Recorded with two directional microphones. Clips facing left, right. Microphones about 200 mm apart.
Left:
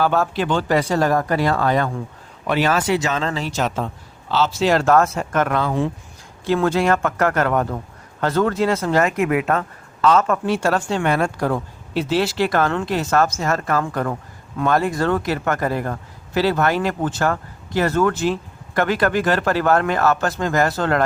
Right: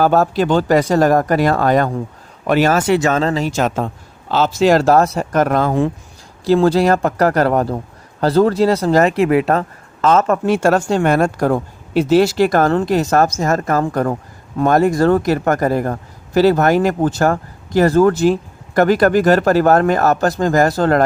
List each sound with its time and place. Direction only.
0.0 s speech: 40° right (ahead or behind)
6.4 s speech: 35° right (ahead or behind)